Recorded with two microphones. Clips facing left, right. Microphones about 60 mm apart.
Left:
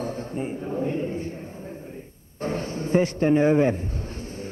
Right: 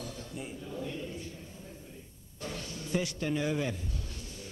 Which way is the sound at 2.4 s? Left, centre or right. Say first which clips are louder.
Left 12 dB; left.